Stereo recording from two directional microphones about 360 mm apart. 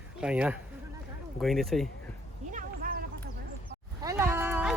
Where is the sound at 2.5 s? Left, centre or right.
Right.